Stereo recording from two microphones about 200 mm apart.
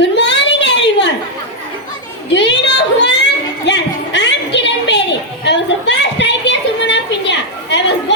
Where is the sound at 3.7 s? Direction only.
60° left (ahead or behind).